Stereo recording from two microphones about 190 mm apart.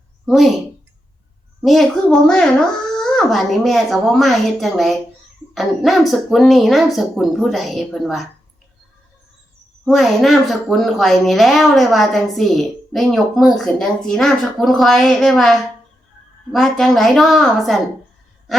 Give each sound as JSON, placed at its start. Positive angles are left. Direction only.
{"t": 0.3, "sound": "a woman's voice", "side_deg": 0}
{"t": 1.6, "sound": "a woman's voice", "side_deg": 0}
{"t": 9.8, "sound": "a woman's voice", "side_deg": 0}